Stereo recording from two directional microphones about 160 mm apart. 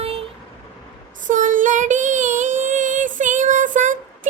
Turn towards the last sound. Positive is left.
turn(degrees=-55)  # may be behind; listen again after turning